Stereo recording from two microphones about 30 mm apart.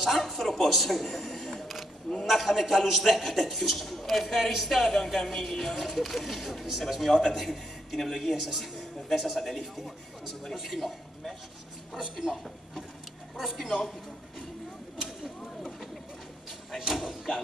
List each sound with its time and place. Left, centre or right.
0.0 s a sound: centre
0.7 s a man's voice: centre
1.6 s a sound: centre
2.2 s a man's voice: centre
10.8 s a man's voice: centre
11.9 s a woman's voice: centre
13.4 s speech: centre
15.0 s a sound: centre
16.7 s a woman's voice: centre